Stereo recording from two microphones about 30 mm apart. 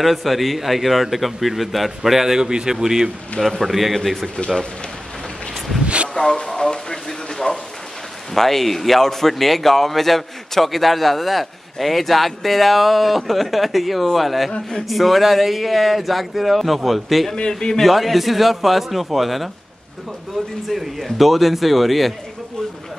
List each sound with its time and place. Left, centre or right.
0.0 s a man's voice: centre
3.3 s a man's voice: centre
6.1 s speech: left
8.4 s a man's voice: centre
17.5 s a man's voice: left
17.8 s a man's voice: centre
20.6 s a man's voice: centre